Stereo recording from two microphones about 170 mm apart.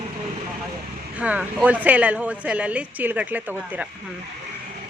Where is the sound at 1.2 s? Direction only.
10° right (ahead or behind).